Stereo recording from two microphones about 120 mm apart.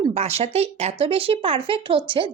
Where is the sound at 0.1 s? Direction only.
55° right (ahead or behind).